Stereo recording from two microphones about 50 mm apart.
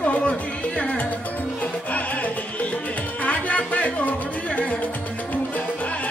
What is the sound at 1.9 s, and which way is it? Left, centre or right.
Music, left.